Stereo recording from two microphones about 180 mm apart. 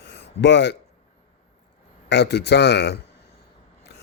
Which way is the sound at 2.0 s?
70° left (ahead or behind).